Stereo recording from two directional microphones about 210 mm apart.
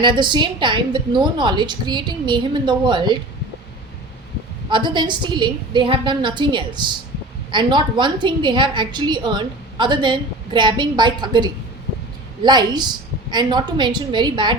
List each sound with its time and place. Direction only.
0.0 s a woman's voice: 20° right (ahead or behind)
4.7 s a woman's voice: 20° right (ahead or behind)